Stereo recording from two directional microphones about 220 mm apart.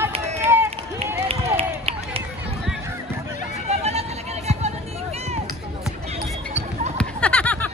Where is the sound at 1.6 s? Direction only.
25° right (ahead or behind).